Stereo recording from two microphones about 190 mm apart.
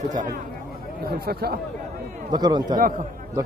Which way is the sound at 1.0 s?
55° right (ahead or behind).